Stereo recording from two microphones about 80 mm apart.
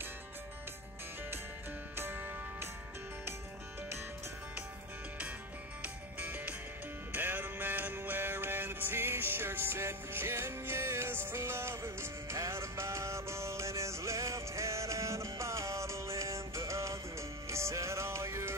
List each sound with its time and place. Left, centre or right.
2.0 s music: right
5.8 s music: right